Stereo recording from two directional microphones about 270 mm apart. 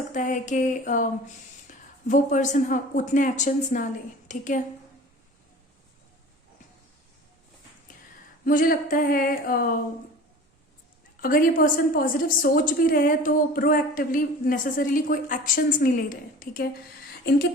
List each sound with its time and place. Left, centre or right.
0.1 s speech: left
8.4 s a woman's voice: left
11.2 s a woman's voice: left